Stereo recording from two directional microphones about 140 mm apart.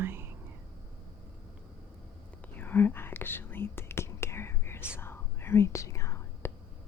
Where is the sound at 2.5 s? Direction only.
15° left (ahead or behind).